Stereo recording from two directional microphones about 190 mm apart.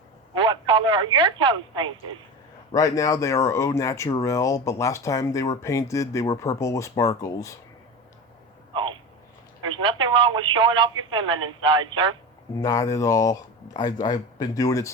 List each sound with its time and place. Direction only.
0.3 s speech: 25° right (ahead or behind)
2.7 s speech: 20° left (ahead or behind)
8.7 s a sound: 25° right (ahead or behind)
9.6 s speech: 25° right (ahead or behind)
12.5 s speech: 15° left (ahead or behind)